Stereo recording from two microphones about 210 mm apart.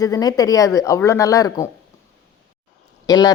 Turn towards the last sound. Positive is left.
turn(degrees=20)  # may be behind; listen again after turning